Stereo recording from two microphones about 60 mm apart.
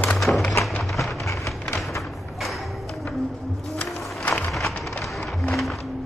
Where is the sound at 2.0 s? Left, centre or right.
Centre.